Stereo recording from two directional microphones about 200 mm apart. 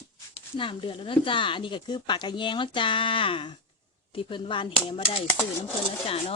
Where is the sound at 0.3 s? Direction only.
25° left (ahead or behind).